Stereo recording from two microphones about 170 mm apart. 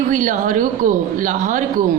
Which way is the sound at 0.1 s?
50° right (ahead or behind).